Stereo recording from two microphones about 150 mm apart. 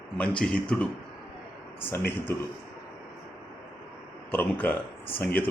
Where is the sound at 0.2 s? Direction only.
5° left (ahead or behind).